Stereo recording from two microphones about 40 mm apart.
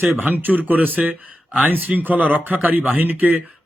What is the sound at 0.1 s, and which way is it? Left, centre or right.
Speech, right.